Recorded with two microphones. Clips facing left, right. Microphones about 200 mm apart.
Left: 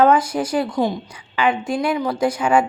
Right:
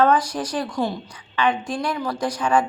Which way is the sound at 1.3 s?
10° left (ahead or behind).